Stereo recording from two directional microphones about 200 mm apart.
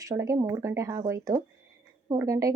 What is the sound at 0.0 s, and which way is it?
A woman's voice, 15° right (ahead or behind).